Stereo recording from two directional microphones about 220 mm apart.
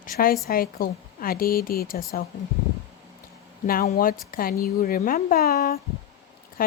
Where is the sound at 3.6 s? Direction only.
40° left (ahead or behind).